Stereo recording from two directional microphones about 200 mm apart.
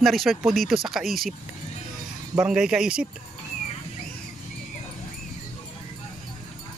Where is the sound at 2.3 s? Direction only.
5° right (ahead or behind).